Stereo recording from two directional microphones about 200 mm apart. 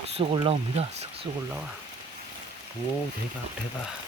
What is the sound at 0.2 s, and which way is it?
Speech, 30° right (ahead or behind).